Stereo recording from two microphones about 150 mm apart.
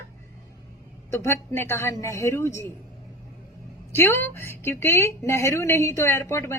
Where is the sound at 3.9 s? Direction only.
15° left (ahead or behind).